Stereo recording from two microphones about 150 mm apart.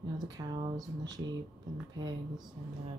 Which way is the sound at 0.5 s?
30° right (ahead or behind).